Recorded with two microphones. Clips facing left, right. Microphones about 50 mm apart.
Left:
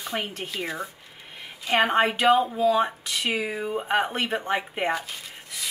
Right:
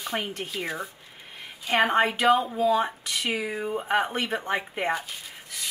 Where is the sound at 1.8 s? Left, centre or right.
Left.